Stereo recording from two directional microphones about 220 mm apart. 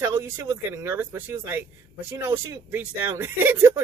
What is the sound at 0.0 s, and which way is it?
Speech, 10° right (ahead or behind).